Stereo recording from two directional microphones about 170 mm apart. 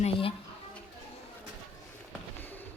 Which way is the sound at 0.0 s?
35° left (ahead or behind).